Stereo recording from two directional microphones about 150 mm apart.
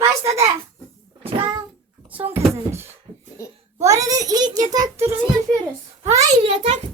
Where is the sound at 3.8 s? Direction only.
20° right (ahead or behind).